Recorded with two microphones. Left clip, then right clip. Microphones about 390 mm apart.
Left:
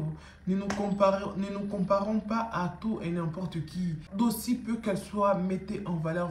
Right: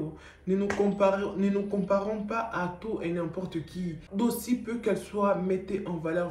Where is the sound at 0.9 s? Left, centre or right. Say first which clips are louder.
Left 4 dB; centre.